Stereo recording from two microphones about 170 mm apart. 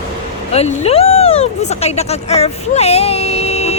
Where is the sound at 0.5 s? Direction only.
40° left (ahead or behind).